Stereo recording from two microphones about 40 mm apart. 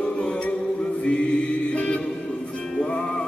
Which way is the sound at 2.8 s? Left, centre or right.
Left.